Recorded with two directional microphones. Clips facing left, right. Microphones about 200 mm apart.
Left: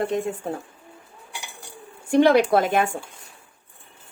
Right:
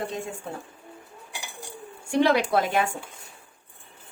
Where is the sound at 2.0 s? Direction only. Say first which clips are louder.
Left 5 dB; 50° left (ahead or behind).